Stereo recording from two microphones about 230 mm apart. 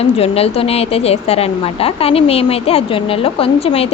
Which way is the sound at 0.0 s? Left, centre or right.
Left.